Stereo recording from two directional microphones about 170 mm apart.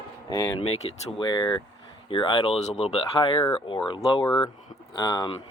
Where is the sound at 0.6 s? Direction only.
30° left (ahead or behind).